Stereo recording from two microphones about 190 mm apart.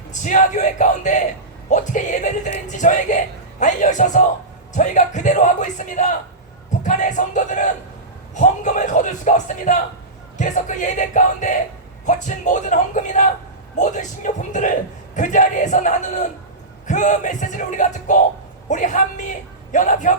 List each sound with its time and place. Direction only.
0.1 s a man's voice: 40° left (ahead or behind)